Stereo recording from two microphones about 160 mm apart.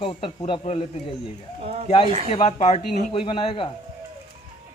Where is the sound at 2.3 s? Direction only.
40° left (ahead or behind).